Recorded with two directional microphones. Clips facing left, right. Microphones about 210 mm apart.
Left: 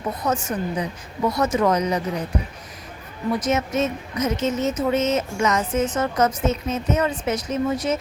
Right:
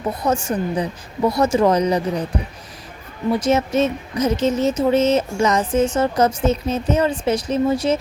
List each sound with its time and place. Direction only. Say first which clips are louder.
0.2 s speech: right 4 dB; 30° right (ahead or behind)
3.3 s speech: right 5 dB; 30° right (ahead or behind)